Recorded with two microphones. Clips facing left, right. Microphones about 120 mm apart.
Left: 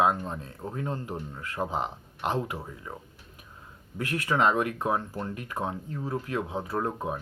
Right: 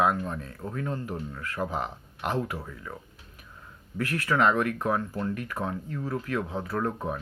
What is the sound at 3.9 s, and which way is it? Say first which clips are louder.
Speech: right 1 dB; 20° left (ahead or behind).